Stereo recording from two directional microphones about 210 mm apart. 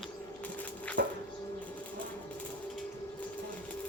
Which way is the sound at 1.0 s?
50° right (ahead or behind).